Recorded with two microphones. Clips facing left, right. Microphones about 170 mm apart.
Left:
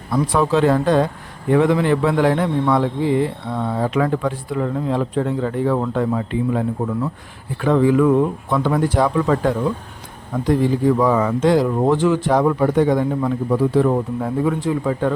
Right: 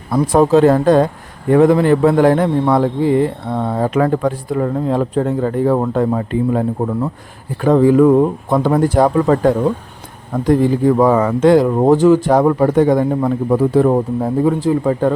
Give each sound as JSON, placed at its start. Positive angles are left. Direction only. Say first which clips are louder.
{"t": 0.1, "sound": "a man's voice", "louder": "right 6 dB", "side_deg": -45}